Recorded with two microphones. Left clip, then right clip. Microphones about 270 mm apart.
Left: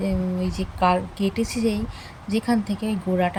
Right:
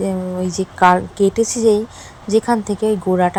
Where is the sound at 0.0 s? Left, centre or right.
Centre.